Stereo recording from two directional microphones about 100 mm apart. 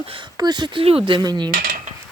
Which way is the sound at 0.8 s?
65° right (ahead or behind).